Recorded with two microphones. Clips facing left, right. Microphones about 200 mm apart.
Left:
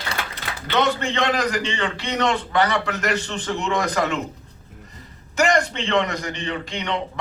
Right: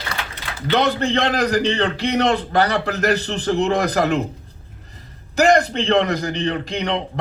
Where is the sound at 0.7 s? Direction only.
35° right (ahead or behind).